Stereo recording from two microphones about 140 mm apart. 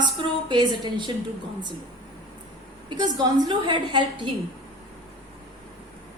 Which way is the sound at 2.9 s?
30° right (ahead or behind).